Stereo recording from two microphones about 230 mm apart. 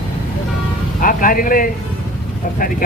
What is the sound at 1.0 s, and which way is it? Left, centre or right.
Speech, left.